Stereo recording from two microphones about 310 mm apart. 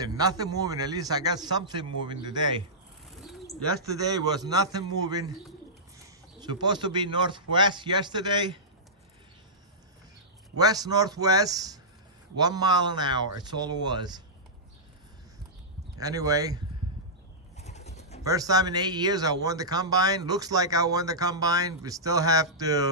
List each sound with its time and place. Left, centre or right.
0.0 s speech: centre
3.1 s bird: centre
3.8 s speech: centre
10.6 s speech: centre
16.0 s speech: centre
17.6 s pulleys: left
18.2 s speech: centre